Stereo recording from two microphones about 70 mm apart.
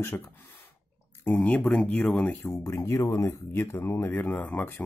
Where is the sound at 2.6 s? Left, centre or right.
Left.